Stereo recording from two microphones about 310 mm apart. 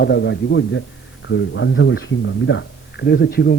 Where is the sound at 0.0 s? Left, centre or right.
Left.